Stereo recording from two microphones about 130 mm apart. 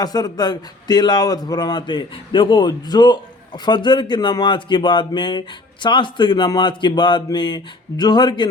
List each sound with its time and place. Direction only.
0.0 s speech: 30° left (ahead or behind)